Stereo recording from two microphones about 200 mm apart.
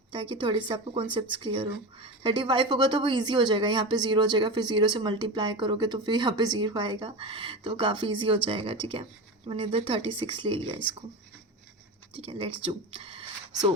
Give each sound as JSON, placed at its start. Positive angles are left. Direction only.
{"t": 0.1, "sound": "a woman's voice", "side_deg": -25}
{"t": 12.1, "sound": "a woman's voice", "side_deg": -25}